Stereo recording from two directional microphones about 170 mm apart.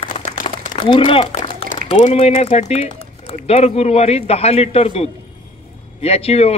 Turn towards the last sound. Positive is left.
turn(degrees=35)  # may be behind; listen again after turning